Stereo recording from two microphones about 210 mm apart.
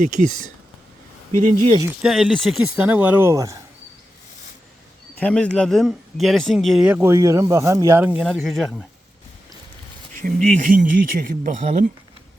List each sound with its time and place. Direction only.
0.0 s speech: 40° right (ahead or behind)
2.0 s speech: centre (ahead or behind)
5.2 s speech: 5° left (ahead or behind)
10.2 s speech: 40° right (ahead or behind)